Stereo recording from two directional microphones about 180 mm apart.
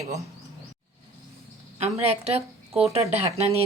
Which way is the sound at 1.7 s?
35° right (ahead or behind).